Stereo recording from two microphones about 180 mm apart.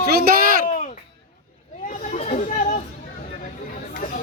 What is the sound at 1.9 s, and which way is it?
Chatter, 40° left (ahead or behind).